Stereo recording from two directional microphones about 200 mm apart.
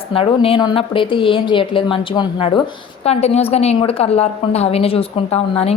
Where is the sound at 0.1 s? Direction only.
30° left (ahead or behind).